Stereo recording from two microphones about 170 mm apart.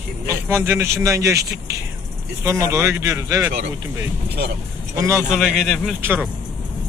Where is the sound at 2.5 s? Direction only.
15° right (ahead or behind).